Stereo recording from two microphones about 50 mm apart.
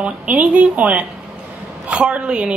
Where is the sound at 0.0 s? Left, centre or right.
Right.